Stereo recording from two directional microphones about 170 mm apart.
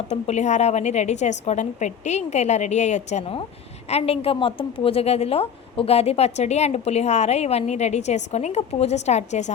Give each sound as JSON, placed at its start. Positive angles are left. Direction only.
{"t": 0.1, "sound": "a woman's voice", "side_deg": 40}